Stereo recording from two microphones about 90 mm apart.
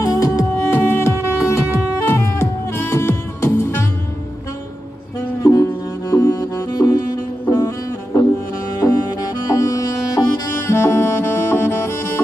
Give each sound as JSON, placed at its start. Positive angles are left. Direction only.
{"t": 0.0, "sound": "music", "side_deg": 40}
{"t": 0.7, "sound": "music", "side_deg": 30}
{"t": 5.4, "sound": "music", "side_deg": 35}
{"t": 7.4, "sound": "music", "side_deg": 30}
{"t": 9.6, "sound": "music", "side_deg": 40}